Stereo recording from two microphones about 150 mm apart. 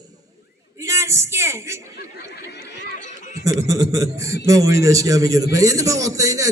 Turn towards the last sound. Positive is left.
turn(degrees=-20)  # may be behind; listen again after turning